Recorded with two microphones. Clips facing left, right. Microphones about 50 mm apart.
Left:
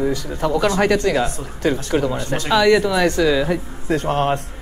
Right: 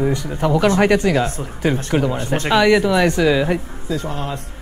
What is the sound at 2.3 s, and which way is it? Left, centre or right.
Speech, right.